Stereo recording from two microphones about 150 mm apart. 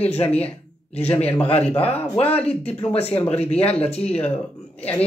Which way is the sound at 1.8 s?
10° left (ahead or behind).